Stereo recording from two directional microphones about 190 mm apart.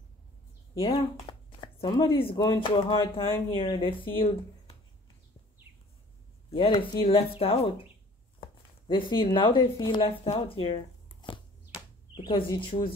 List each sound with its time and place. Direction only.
0.8 s speech: 25° left (ahead or behind)
6.5 s speech: 30° left (ahead or behind)